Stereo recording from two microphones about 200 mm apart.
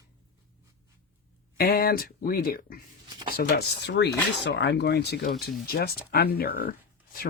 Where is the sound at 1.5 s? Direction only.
50° left (ahead or behind).